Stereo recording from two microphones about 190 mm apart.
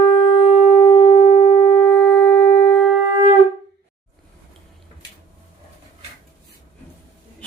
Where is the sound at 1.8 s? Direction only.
10° left (ahead or behind).